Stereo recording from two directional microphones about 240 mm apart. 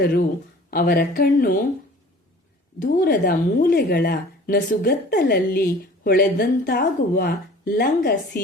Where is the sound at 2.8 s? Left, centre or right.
Left.